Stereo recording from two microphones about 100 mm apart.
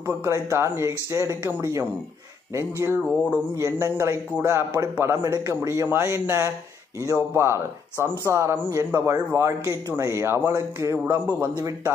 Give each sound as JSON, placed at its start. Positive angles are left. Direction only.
{"t": 0.0, "sound": "speech", "side_deg": -25}
{"t": 4.9, "sound": "speech", "side_deg": -20}
{"t": 5.2, "sound": "speech", "side_deg": -35}